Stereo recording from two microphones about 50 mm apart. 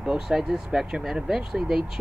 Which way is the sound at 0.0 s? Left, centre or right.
Centre.